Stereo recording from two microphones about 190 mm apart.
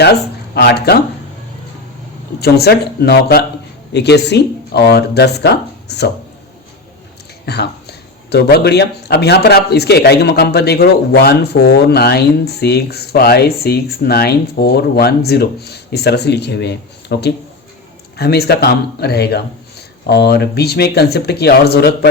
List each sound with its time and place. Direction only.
0.0 s speech: 60° left (ahead or behind)
2.4 s speech: 55° left (ahead or behind)
7.4 s speech: 60° left (ahead or behind)